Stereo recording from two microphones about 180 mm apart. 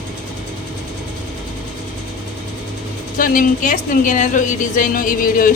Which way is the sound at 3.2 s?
45° left (ahead or behind).